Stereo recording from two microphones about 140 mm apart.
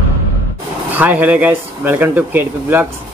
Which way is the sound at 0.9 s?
10° right (ahead or behind).